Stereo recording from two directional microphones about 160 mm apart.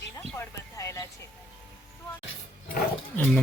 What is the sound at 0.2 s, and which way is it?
Music, 15° left (ahead or behind).